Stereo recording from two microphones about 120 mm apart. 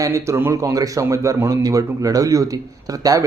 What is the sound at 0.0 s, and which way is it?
A man's voice, 25° right (ahead or behind).